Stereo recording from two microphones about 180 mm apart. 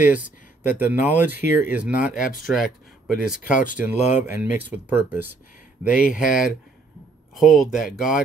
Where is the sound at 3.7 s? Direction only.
10° right (ahead or behind).